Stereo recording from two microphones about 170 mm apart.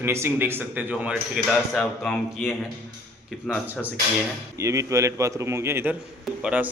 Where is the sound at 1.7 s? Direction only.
5° left (ahead or behind).